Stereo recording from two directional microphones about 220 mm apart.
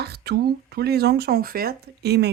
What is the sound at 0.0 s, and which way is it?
Speech, 50° right (ahead or behind).